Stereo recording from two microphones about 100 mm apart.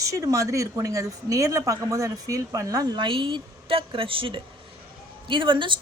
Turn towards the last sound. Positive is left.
turn(degrees=-55)  # may be behind; listen again after turning